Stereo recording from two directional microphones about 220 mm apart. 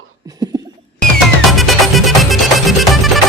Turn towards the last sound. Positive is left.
turn(degrees=0)  # may be behind; listen again after turning